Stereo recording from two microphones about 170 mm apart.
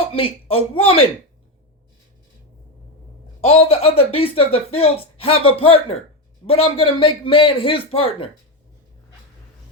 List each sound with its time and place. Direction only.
0.1 s speech: 30° left (ahead or behind)
3.4 s speech: 40° left (ahead or behind)